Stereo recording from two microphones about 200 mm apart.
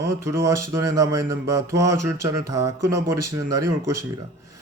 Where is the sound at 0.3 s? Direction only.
15° right (ahead or behind).